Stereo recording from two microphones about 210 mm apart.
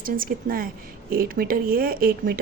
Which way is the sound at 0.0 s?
45° right (ahead or behind).